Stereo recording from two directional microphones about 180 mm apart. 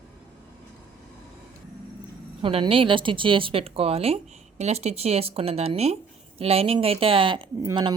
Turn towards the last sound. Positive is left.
turn(degrees=-25)  # may be behind; listen again after turning